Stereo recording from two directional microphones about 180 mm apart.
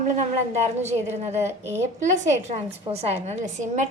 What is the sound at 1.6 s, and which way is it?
Speech, 15° right (ahead or behind).